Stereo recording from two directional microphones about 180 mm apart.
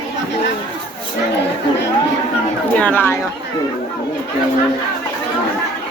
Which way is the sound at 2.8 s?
10° left (ahead or behind).